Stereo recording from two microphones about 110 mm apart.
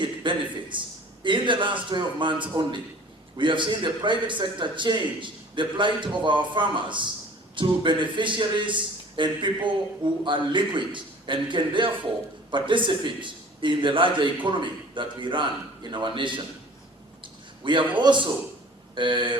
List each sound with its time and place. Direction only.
0.0 s a man's voice: 45° right (ahead or behind)
17.6 s a man's voice: 50° right (ahead or behind)